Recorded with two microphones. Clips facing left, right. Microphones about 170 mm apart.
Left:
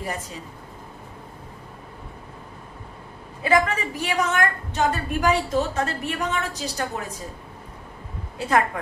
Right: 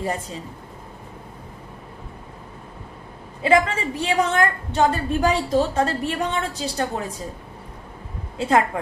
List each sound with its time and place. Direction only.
0.0 s a woman's voice: 30° right (ahead or behind)
3.4 s a woman's voice: 30° right (ahead or behind)
8.4 s a woman's voice: 25° right (ahead or behind)